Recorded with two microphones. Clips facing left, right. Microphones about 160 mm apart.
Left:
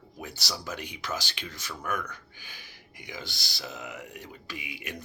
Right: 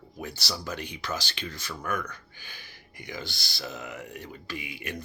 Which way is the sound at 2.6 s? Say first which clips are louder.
Right 2 dB; 55° right (ahead or behind).